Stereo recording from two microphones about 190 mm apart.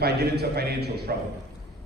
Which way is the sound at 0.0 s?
60° right (ahead or behind).